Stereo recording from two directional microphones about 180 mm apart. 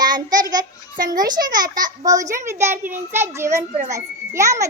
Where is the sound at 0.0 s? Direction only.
20° right (ahead or behind).